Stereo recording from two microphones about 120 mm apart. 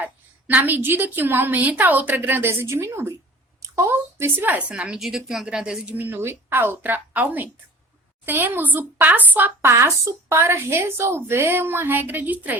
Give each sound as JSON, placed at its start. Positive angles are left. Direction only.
{"t": 0.0, "sound": "speech", "side_deg": -15}